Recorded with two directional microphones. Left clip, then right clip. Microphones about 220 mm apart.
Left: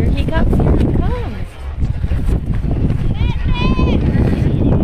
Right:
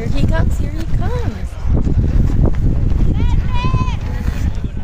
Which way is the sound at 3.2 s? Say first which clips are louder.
Left 4 dB; 40° right (ahead or behind).